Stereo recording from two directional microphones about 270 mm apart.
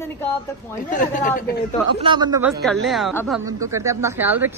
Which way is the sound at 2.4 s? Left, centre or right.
Centre.